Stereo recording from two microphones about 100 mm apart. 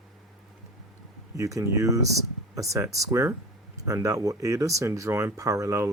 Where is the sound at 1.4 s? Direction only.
30° right (ahead or behind).